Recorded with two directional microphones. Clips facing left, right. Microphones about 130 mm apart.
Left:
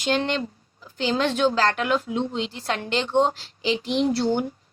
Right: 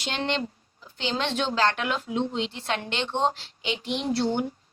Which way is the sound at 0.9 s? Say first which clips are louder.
Left 5 dB; 40° left (ahead or behind).